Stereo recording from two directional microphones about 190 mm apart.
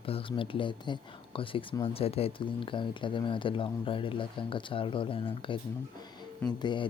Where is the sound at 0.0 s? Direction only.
30° left (ahead or behind).